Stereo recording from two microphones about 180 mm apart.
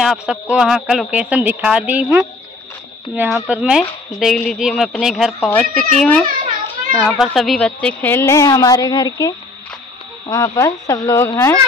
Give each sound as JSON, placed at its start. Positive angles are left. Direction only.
{"t": 0.0, "sound": "a woman's voice", "side_deg": -5}
{"t": 3.3, "sound": "a woman's voice", "side_deg": -5}